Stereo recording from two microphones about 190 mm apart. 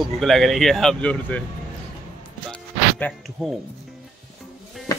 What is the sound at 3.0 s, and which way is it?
Speech, centre (ahead or behind).